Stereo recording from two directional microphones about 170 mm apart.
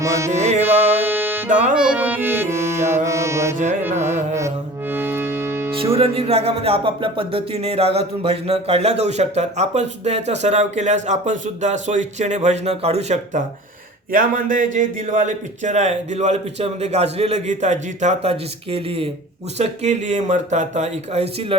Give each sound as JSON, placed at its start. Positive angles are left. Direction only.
{"t": 0.0, "sound": "music", "side_deg": -15}
{"t": 0.3, "sound": "a man's voice", "side_deg": -40}
{"t": 0.6, "sound": "music", "side_deg": -10}
{"t": 3.8, "sound": "carnatic music", "side_deg": -15}
{"t": 4.4, "sound": "music", "side_deg": -15}
{"t": 5.7, "sound": "music", "side_deg": -35}
{"t": 14.1, "sound": "a man's voice", "side_deg": -55}
{"t": 19.5, "sound": "music", "side_deg": -40}